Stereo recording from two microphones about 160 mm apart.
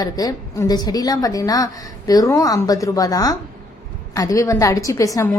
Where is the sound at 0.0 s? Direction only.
25° left (ahead or behind).